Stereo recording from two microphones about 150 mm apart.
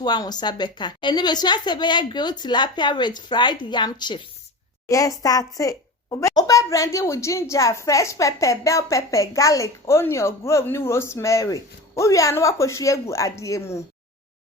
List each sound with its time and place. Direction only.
0.0 s speech: 30° left (ahead or behind)